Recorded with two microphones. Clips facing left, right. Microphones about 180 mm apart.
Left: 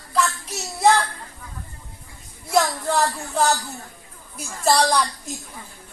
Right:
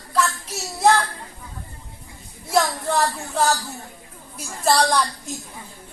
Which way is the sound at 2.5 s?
Centre (ahead or behind).